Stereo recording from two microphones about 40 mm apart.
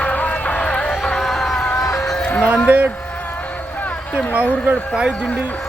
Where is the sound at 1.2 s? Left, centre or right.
Centre.